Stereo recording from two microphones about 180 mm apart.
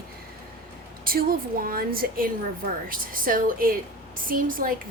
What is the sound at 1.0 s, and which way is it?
A woman's voice, 55° right (ahead or behind).